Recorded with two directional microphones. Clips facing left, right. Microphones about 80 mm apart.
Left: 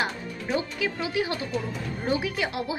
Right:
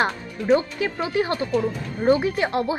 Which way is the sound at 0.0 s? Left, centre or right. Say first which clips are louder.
Right 6 dB; right.